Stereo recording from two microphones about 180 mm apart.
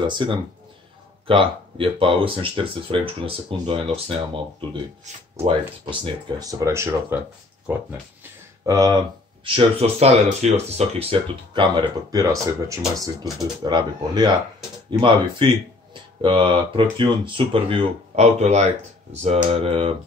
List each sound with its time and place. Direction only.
0.0 s speech: 25° right (ahead or behind)
6.2 s speech: 20° right (ahead or behind)
8.6 s speech: 20° right (ahead or behind)